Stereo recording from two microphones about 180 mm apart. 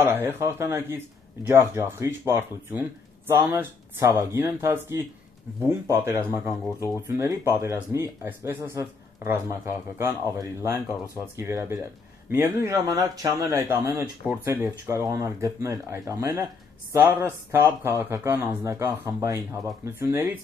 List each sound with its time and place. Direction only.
0.0 s speech: 10° right (ahead or behind)